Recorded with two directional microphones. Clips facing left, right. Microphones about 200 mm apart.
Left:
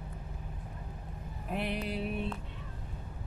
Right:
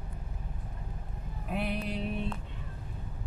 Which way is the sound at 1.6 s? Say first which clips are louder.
Right 1 dB; centre (ahead or behind).